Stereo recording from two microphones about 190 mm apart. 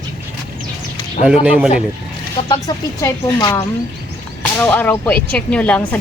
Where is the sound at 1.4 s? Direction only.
5° right (ahead or behind).